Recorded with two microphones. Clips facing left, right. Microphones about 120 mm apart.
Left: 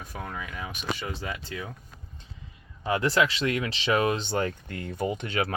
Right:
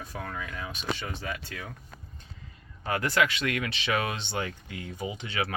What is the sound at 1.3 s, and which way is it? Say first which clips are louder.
Speech: left 2 dB; 25° left (ahead or behind).